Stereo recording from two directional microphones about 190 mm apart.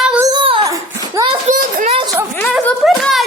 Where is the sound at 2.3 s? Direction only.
10° left (ahead or behind).